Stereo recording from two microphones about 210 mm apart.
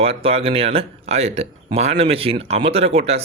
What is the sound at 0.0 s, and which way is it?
A man's voice, 30° right (ahead or behind).